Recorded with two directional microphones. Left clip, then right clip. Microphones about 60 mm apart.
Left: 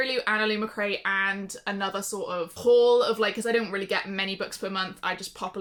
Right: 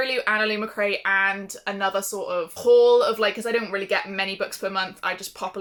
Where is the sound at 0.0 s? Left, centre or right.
Left.